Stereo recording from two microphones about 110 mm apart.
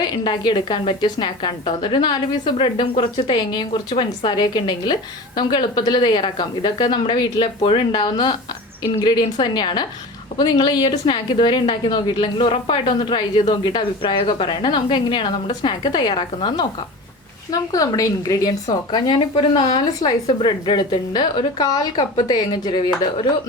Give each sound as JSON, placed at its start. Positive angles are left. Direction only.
{"t": 0.0, "sound": "a woman's voice", "side_deg": 40}
{"t": 17.5, "sound": "a woman's voice", "side_deg": 30}